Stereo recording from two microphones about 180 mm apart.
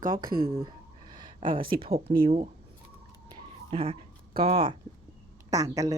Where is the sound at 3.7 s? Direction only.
30° right (ahead or behind).